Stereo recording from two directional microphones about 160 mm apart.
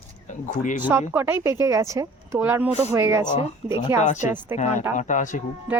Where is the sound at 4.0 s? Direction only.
50° left (ahead or behind).